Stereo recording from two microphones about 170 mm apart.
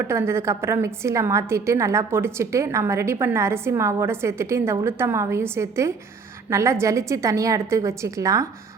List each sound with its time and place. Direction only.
0.1 s a woman's voice: 15° right (ahead or behind)